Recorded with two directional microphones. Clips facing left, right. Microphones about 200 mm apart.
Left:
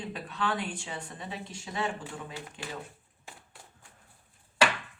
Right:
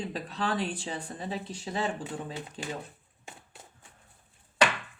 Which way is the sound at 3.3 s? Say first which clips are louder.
Right 2 dB; 20° right (ahead or behind).